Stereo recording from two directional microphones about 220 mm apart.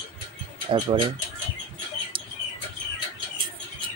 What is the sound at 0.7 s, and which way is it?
Speech, 20° right (ahead or behind).